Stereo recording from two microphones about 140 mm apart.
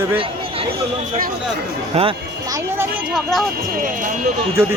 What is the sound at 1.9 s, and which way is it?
Speech, 50° right (ahead or behind).